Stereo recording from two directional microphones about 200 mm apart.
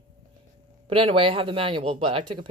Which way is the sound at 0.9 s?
25° right (ahead or behind).